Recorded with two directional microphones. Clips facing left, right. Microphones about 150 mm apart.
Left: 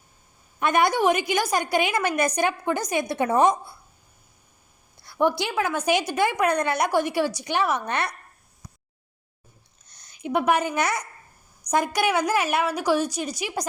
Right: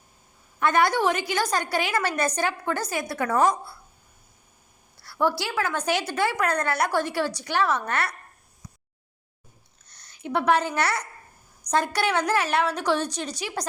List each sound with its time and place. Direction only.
0.6 s a woman's voice: 15° left (ahead or behind)
4.9 s a woman's voice: 20° left (ahead or behind)
9.8 s a woman's voice: 15° left (ahead or behind)